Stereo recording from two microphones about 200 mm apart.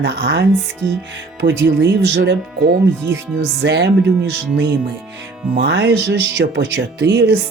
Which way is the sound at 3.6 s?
60° right (ahead or behind).